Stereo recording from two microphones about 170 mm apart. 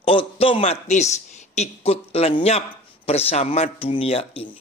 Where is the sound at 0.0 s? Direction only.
35° left (ahead or behind).